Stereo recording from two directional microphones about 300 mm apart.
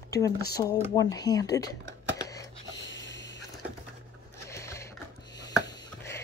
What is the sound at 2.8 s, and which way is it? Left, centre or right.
Snort, left.